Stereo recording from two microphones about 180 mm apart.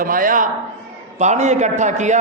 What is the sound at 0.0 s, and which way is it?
A man's voice, 50° right (ahead or behind).